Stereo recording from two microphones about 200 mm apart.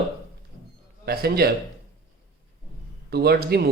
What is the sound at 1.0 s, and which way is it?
Speech, 50° right (ahead or behind).